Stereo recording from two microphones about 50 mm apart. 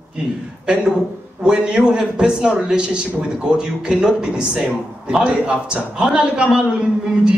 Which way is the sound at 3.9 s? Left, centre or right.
Centre.